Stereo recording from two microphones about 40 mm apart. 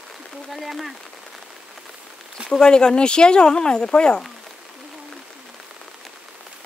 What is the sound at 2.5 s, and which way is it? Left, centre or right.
Speech, centre.